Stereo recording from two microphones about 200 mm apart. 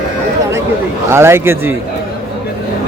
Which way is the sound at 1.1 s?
10° right (ahead or behind).